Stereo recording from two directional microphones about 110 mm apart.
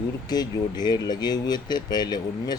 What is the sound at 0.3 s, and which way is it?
A man's voice, 40° left (ahead or behind).